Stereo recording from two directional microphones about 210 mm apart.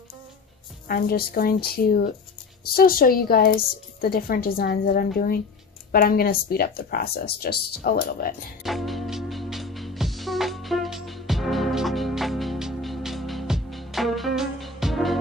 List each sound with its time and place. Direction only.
0.8 s a woman's voice: 45° left (ahead or behind)
8.6 s music: centre (ahead or behind)